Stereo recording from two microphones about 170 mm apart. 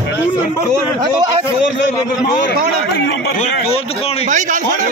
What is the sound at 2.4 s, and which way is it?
Speech, 85° left.